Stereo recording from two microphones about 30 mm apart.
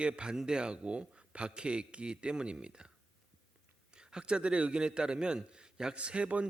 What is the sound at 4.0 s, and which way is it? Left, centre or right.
A man's voice, right.